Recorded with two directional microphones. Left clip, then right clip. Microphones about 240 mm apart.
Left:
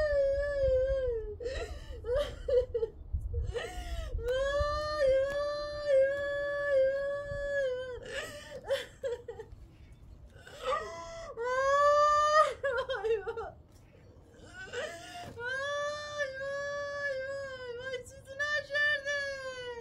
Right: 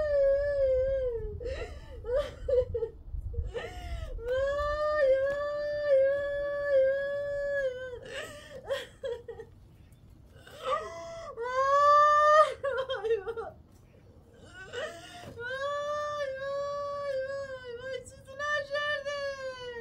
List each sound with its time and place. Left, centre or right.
0.0 s howl: left
1.4 s whimper: left; by 9.2 s centre
10.5 s whimper: centre
14.5 s a sound: centre